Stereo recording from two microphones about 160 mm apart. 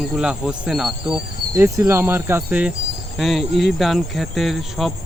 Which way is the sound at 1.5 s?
15° right (ahead or behind).